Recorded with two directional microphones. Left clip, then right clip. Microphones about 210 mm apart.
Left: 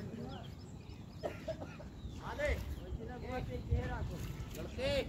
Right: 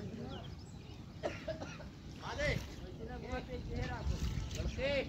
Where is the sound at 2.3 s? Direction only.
30° left (ahead or behind).